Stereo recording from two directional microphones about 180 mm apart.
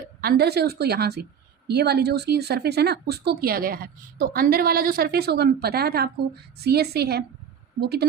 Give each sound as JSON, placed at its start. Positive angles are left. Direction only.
{"t": 0.2, "sound": "a woman's voice", "side_deg": -60}